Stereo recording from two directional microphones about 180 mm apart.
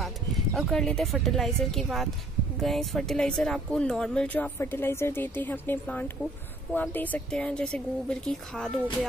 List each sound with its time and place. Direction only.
0.6 s speech: 5° left (ahead or behind)